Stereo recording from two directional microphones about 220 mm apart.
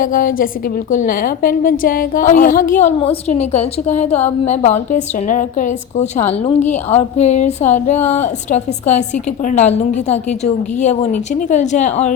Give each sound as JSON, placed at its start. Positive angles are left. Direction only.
{"t": 0.0, "sound": "a woman's voice", "side_deg": 40}